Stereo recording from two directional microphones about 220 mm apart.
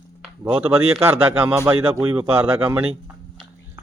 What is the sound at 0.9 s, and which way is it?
Speech, 10° right (ahead or behind).